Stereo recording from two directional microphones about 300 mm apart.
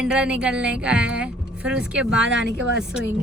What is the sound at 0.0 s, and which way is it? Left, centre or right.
A woman's voice, centre.